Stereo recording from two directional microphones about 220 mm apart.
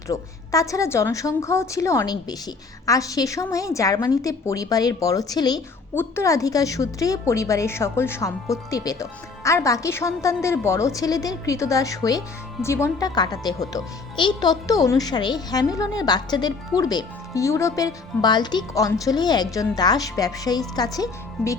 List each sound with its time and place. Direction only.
0.1 s a woman's voice: 15° left (ahead or behind)